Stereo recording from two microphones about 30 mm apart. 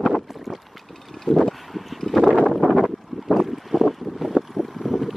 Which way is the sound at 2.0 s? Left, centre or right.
Centre.